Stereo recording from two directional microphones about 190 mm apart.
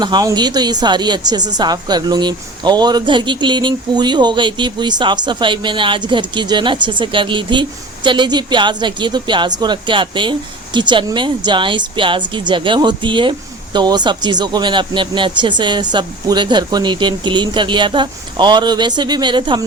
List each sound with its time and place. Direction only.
0.0 s speech: 20° right (ahead or behind)